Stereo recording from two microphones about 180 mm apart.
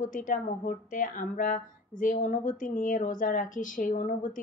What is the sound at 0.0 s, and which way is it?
Speech, 45° left (ahead or behind).